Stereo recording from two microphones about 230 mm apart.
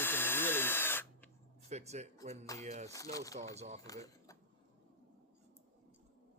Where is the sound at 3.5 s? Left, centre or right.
Right.